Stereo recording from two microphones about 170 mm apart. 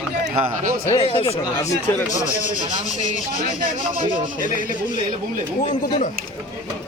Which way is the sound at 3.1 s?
45° left (ahead or behind).